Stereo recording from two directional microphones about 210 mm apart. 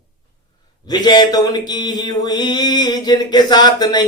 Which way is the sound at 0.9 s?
20° left (ahead or behind).